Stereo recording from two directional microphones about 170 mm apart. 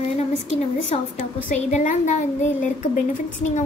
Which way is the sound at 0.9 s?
40° left (ahead or behind).